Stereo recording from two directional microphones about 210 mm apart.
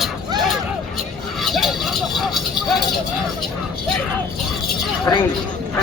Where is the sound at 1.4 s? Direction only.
Centre (ahead or behind).